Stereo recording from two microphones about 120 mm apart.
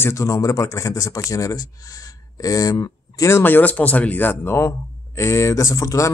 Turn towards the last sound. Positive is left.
turn(degrees=25)  # may be behind; listen again after turning